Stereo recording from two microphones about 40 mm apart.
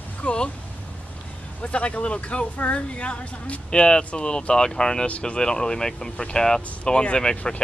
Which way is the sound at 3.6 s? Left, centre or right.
Left.